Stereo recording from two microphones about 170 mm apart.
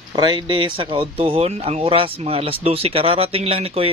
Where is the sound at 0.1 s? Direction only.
25° right (ahead or behind).